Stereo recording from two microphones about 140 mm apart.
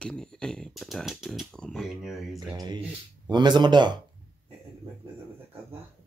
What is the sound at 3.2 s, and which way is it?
Speech, 30° right (ahead or behind).